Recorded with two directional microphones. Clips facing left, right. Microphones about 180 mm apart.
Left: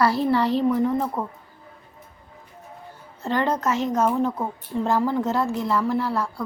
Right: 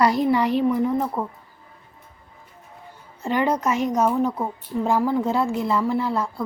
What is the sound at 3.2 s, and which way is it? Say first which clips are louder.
A woman's voice: right 1 dB; 15° right (ahead or behind).